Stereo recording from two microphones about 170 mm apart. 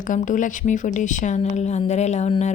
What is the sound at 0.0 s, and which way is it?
Speech, 50° left (ahead or behind).